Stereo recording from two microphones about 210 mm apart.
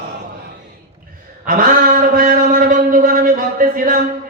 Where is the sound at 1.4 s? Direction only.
40° right (ahead or behind).